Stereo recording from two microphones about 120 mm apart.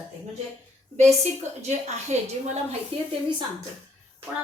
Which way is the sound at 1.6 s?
70° right (ahead or behind).